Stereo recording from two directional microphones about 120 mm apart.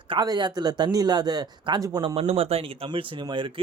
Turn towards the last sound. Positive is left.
turn(degrees=-40)  # may be behind; listen again after turning